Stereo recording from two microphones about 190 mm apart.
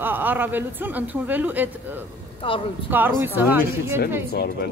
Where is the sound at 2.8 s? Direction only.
10° right (ahead or behind).